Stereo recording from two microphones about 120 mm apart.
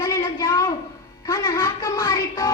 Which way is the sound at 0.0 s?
30° left (ahead or behind).